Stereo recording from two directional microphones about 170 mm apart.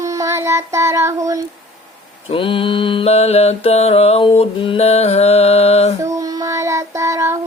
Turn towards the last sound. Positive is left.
turn(degrees=-20)  # may be behind; listen again after turning